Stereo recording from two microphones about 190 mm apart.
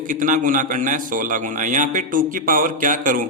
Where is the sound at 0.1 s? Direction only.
45° right (ahead or behind).